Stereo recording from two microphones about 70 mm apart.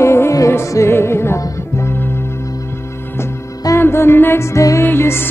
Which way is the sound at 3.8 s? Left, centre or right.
Left.